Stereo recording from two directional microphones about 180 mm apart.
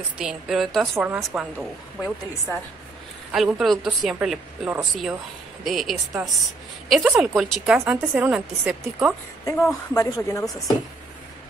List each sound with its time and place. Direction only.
0.2 s a woman's voice: 5° right (ahead or behind)
9.7 s speech: 20° left (ahead or behind)